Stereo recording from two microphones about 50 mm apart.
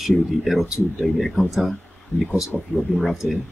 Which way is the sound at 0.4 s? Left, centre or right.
Centre.